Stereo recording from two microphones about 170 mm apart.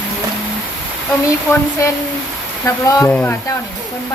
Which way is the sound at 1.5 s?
20° left (ahead or behind).